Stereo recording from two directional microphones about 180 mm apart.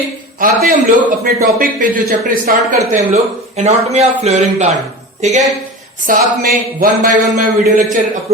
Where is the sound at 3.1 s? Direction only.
35° right (ahead or behind).